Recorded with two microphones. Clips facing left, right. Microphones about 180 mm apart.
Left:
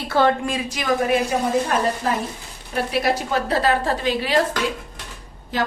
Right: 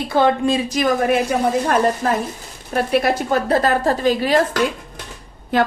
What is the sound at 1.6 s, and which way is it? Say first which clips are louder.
A woman's voice: right 4 dB; 55° right (ahead or behind).